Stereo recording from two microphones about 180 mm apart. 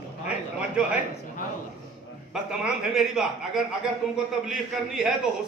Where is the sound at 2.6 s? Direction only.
5° right (ahead or behind).